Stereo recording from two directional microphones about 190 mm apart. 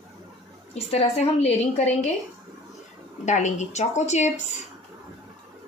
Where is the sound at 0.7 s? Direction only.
35° left (ahead or behind).